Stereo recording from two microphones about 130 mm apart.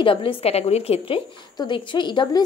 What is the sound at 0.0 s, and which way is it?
Speech, 40° left (ahead or behind).